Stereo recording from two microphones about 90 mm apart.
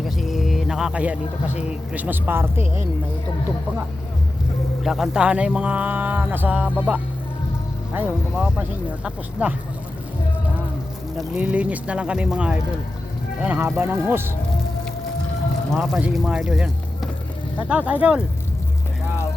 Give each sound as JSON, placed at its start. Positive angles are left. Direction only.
{"t": 0.0, "sound": "music", "side_deg": 0}
{"t": 1.9, "sound": "speech", "side_deg": -20}
{"t": 4.8, "sound": "speech", "side_deg": -5}
{"t": 8.4, "sound": "speech", "side_deg": -10}
{"t": 11.3, "sound": "speech", "side_deg": -15}
{"t": 13.6, "sound": "speech", "side_deg": -25}
{"t": 15.7, "sound": "speech", "side_deg": 0}
{"t": 17.6, "sound": "speech", "side_deg": -15}